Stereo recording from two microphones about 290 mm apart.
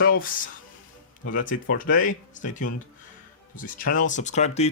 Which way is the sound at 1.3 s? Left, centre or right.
Left.